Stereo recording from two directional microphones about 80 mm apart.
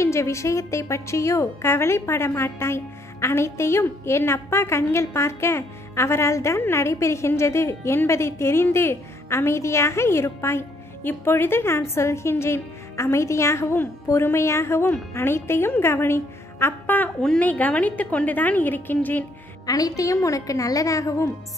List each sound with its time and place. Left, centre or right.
0.0 s a woman's voice: left
17.2 s a woman's voice: centre
17.5 s a woman's voice: centre
19.6 s a woman's voice: left